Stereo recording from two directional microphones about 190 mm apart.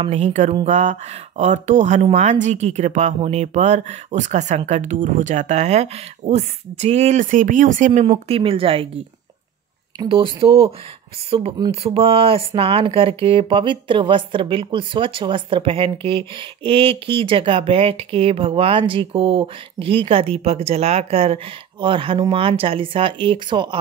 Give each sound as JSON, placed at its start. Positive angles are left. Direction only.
{"t": 0.0, "sound": "speech", "side_deg": -35}